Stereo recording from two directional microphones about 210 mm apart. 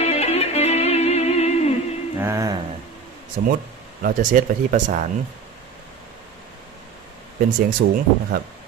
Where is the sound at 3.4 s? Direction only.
40° right (ahead or behind).